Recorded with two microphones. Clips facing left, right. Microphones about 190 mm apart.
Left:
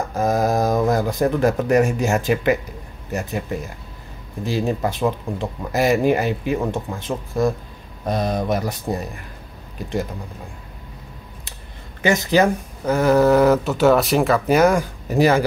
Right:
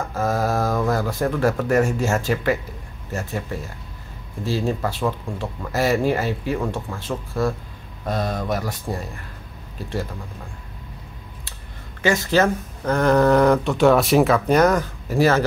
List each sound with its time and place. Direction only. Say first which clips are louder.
0.1 s speech: left 3 dB; 20° left (ahead or behind)
12.0 s speech: left 2 dB; 20° left (ahead or behind)